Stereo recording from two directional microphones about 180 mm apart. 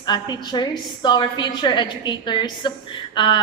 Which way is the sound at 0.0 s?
25° left (ahead or behind).